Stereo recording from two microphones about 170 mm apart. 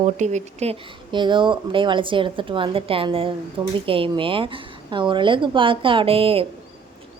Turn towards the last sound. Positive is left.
turn(degrees=-35)  # may be behind; listen again after turning